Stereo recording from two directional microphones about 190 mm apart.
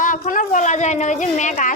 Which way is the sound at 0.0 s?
45° left (ahead or behind).